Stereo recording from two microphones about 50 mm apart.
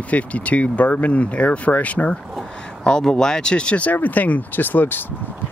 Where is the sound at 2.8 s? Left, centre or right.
Centre.